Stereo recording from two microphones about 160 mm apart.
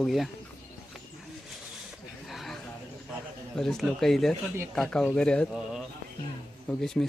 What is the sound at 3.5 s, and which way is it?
Speech, centre (ahead or behind).